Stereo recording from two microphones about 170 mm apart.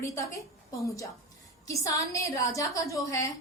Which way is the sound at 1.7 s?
20° left (ahead or behind).